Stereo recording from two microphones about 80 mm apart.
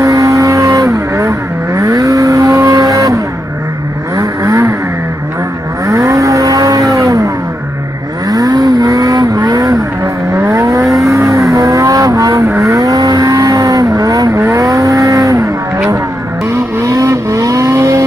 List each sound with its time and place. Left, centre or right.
0.0 s vehicle: right
4.2 s vehicle: right
5.9 s vehicle: right
8.3 s vehicle: right